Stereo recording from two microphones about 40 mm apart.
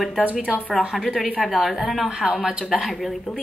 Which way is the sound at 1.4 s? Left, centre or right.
Centre.